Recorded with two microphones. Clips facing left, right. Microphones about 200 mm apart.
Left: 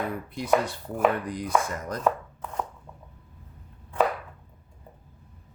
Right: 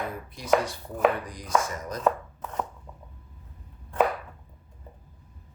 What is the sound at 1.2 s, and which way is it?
Speech, 60° left (ahead or behind).